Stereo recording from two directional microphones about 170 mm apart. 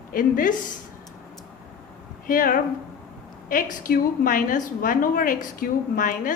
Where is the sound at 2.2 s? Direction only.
55° left (ahead or behind).